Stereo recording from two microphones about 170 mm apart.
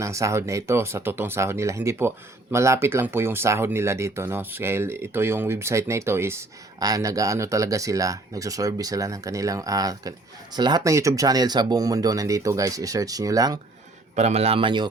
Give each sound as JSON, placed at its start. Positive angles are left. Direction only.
{"t": 0.0, "sound": "speech", "side_deg": -15}
{"t": 14.2, "sound": "a man's voice", "side_deg": -40}